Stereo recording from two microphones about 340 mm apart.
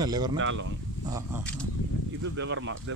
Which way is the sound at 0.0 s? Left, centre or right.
Centre.